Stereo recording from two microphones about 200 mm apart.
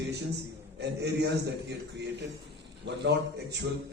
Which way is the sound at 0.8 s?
55° right (ahead or behind).